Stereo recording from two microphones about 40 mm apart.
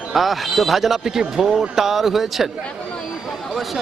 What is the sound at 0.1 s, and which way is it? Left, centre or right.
A man's voice, centre.